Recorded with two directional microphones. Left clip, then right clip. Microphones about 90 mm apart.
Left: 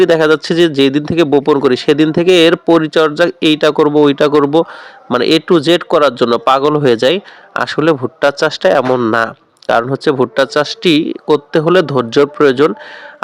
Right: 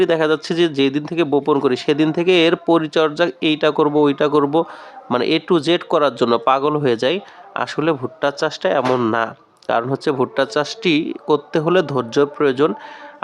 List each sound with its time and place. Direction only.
0.0 s speech: 45° left (ahead or behind)
9.1 s a sound: 55° left (ahead or behind)
9.8 s speech: 35° left (ahead or behind)